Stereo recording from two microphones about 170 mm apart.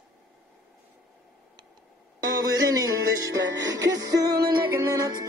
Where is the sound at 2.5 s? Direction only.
20° right (ahead or behind).